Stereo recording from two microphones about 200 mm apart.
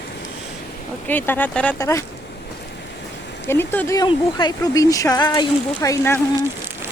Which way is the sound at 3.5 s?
10° left (ahead or behind).